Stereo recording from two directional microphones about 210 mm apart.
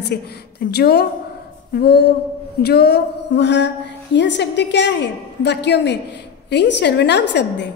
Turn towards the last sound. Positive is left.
turn(degrees=55)  # may be behind; listen again after turning